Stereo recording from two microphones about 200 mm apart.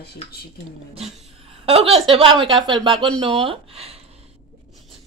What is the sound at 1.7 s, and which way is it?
Speech, 30° right (ahead or behind).